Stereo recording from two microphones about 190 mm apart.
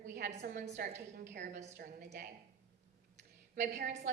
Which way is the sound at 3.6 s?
60° right (ahead or behind).